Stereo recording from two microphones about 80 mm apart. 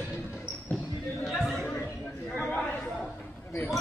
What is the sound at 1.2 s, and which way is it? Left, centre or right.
Chatter, centre.